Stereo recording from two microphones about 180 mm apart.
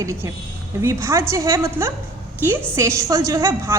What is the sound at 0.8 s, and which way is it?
A woman's voice, 15° right (ahead or behind).